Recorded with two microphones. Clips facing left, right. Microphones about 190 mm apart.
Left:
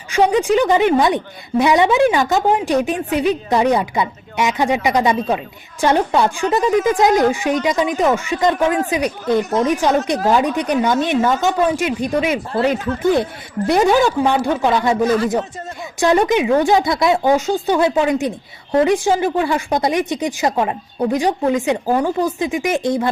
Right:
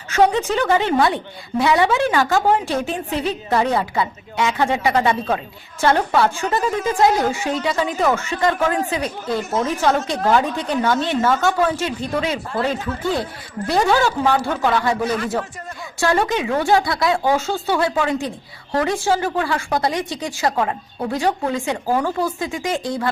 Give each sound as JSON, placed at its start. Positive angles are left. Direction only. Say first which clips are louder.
{"t": 0.1, "sound": "a woman's voice", "louder": "left 3 dB", "side_deg": 15}
{"t": 16.0, "sound": "speech", "louder": "left 5 dB", "side_deg": 20}